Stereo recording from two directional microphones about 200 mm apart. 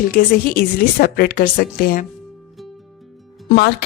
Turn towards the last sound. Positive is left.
turn(degrees=55)  # may be behind; listen again after turning